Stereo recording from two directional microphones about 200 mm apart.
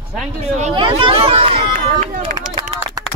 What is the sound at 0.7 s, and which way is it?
Speech, 25° right (ahead or behind).